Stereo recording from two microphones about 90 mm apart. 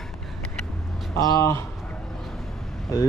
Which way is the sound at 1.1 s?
35° left (ahead or behind).